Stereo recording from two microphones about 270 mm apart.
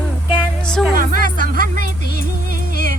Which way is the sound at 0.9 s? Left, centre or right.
Right.